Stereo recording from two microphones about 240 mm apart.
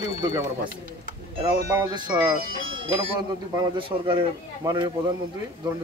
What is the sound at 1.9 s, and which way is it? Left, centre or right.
Speech, centre.